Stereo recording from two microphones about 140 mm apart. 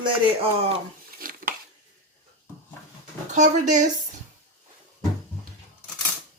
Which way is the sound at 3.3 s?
60° right (ahead or behind).